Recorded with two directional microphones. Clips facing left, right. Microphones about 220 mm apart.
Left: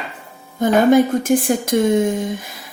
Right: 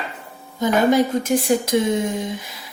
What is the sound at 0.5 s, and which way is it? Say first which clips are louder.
Speech: left 4 dB; 50° left (ahead or behind).